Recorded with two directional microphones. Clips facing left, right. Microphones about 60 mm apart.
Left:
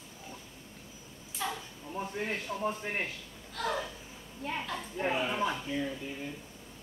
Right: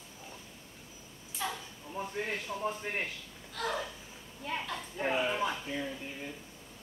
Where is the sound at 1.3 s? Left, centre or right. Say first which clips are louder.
Left 1 dB; centre.